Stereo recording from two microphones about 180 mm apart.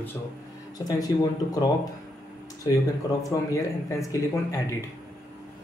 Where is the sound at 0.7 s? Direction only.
20° left (ahead or behind).